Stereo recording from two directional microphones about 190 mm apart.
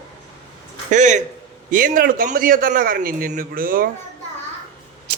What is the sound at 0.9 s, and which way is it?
A man's voice, 40° right (ahead or behind).